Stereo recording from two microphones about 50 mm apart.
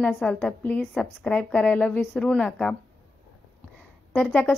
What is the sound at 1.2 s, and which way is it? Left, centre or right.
A woman's voice, left.